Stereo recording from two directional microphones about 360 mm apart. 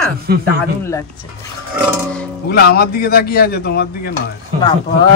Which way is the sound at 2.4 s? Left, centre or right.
Left.